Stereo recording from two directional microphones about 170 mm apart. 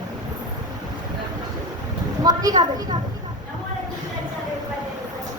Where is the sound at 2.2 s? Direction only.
20° right (ahead or behind).